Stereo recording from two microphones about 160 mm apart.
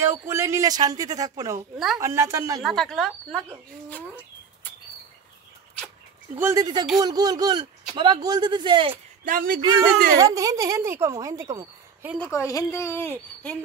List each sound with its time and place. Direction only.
0.0 s speech: 15° right (ahead or behind)
2.6 s speech: centre (ahead or behind)
6.3 s speech: 20° right (ahead or behind)
9.2 s speech: 60° right (ahead or behind)
10.1 s speech: 20° right (ahead or behind)
12.2 s speech: 20° left (ahead or behind)